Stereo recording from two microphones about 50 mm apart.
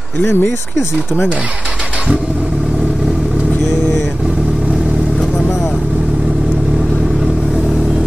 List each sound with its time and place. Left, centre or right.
0.2 s speech: left